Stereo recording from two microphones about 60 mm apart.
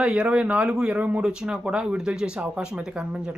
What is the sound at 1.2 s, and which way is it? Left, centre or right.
Speech, centre.